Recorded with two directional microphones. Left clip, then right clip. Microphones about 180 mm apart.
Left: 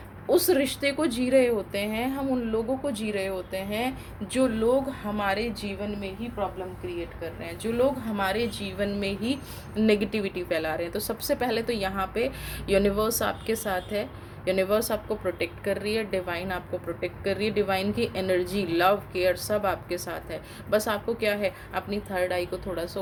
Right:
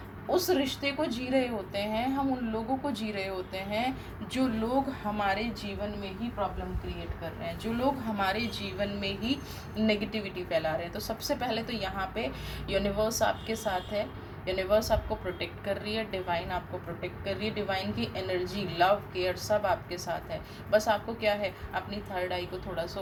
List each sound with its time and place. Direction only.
0.3 s a woman's voice: 50° left (ahead or behind); by 5.5 s 35° left (ahead or behind)
7.4 s a woman's voice: 35° left (ahead or behind)